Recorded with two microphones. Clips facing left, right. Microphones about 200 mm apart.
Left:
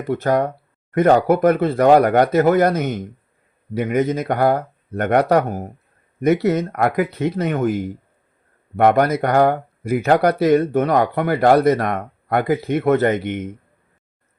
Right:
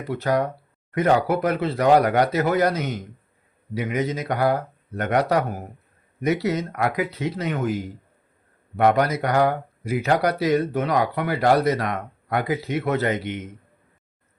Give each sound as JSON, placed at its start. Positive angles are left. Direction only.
{"t": 0.1, "sound": "speech", "side_deg": 50}